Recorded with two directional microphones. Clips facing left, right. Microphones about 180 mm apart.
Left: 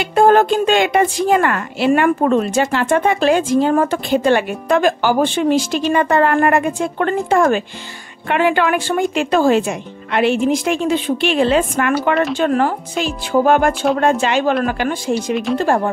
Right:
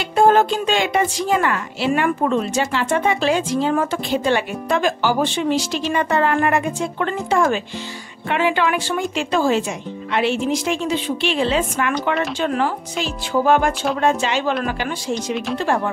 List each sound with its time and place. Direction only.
0.0 s speech: 55° left (ahead or behind)